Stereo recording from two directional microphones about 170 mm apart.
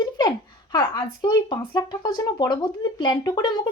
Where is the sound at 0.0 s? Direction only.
25° left (ahead or behind).